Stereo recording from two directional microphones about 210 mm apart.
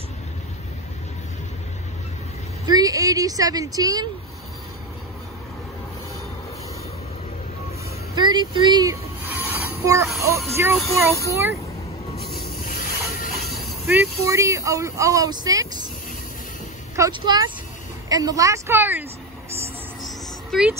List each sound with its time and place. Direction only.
2.6 s a woman's voice: 20° right (ahead or behind)
8.1 s speech: 20° right (ahead or behind)
9.3 s train: 10° right (ahead or behind)
10.2 s speech: 10° right (ahead or behind)
12.2 s a sound: 45° left (ahead or behind)
13.8 s speech: 10° right (ahead or behind)
16.9 s speech: 20° right (ahead or behind)
20.0 s a sound: centre (ahead or behind)